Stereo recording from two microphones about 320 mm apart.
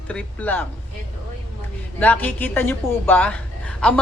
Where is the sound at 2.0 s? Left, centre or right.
Centre.